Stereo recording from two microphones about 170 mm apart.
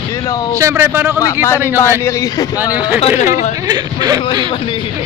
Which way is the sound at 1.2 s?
20° left (ahead or behind).